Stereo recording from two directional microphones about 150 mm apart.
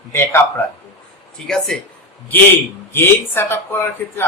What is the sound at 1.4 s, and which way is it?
Speech, 5° left (ahead or behind).